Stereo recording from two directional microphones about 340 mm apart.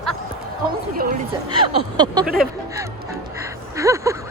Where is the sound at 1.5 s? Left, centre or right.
Centre.